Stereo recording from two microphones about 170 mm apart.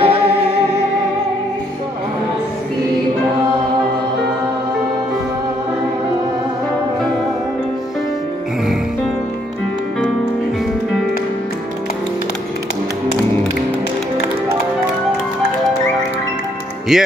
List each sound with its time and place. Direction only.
0.0 s music: 35° right (ahead or behind)
16.9 s speech: 5° right (ahead or behind)